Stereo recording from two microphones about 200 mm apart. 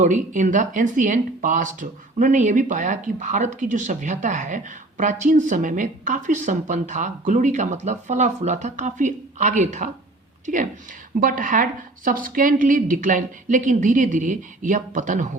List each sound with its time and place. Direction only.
0.0 s a woman's voice: 40° right (ahead or behind)